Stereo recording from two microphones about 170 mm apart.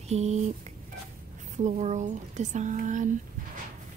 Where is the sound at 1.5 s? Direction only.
45° right (ahead or behind).